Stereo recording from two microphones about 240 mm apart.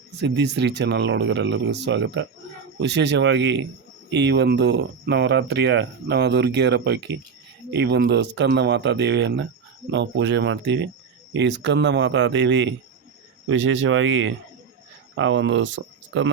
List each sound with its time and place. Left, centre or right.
0.2 s speech: right